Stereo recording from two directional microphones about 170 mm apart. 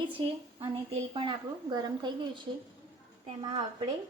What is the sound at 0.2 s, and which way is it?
A woman's voice, 30° right (ahead or behind).